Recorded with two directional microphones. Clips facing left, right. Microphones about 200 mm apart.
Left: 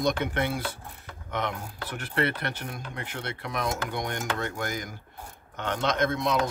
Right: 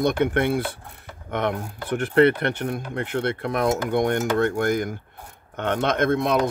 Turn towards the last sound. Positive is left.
turn(degrees=-55)  # may be behind; listen again after turning